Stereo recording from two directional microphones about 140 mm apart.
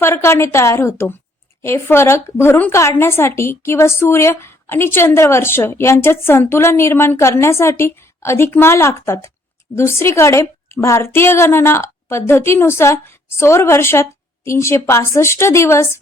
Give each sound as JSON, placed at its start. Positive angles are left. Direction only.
{"t": 0.0, "sound": "a woman's voice", "side_deg": 20}